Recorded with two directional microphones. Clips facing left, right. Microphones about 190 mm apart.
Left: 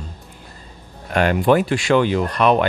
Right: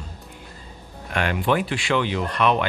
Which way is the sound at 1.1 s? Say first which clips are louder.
Left 7 dB; 40° left (ahead or behind).